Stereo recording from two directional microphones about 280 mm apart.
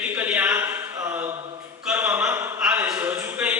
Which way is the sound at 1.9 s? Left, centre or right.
Centre.